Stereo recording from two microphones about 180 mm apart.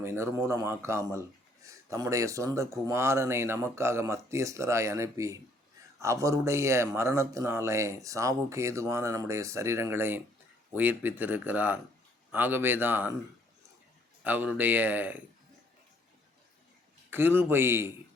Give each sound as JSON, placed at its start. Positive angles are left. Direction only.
{"t": 0.0, "sound": "speech", "side_deg": -15}
{"t": 14.3, "sound": "speech", "side_deg": -10}
{"t": 17.1, "sound": "speech", "side_deg": -10}